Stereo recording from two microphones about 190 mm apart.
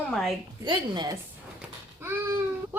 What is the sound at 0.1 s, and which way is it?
Speech, centre (ahead or behind).